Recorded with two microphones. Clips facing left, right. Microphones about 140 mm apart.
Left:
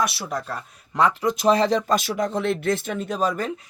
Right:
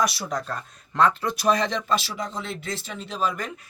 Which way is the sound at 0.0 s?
5° left (ahead or behind).